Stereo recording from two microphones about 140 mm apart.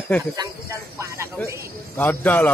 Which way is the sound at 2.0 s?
10° left (ahead or behind).